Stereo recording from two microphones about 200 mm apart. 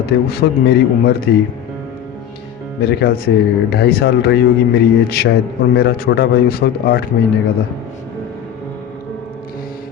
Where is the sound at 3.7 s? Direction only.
55° left (ahead or behind).